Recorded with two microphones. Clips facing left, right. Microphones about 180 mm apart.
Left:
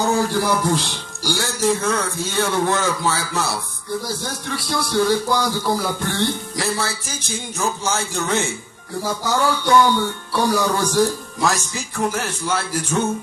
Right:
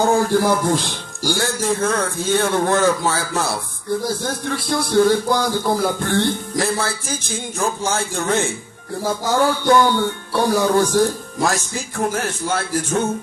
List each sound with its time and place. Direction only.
0.0 s speech: 50° right (ahead or behind)